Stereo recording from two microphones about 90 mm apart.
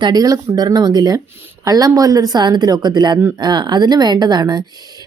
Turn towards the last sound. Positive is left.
turn(degrees=-50)  # may be behind; listen again after turning